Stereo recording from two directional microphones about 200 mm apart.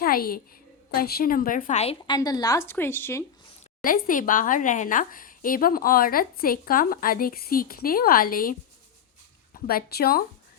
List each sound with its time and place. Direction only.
0.0 s a woman's voice: 45° left (ahead or behind); by 2.1 s 30° left (ahead or behind)
2.1 s a woman's voice: 20° left (ahead or behind)
3.8 s speech: 45° left (ahead or behind)
9.6 s speech: 50° left (ahead or behind)